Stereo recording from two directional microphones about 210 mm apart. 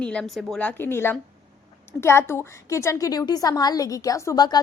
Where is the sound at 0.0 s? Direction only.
5° left (ahead or behind).